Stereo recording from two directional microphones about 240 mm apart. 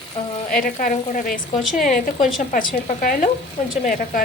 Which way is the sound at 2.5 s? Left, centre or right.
Left.